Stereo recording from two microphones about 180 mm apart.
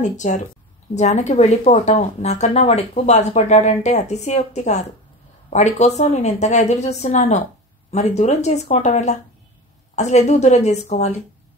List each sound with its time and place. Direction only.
0.0 s speech: 40° left (ahead or behind)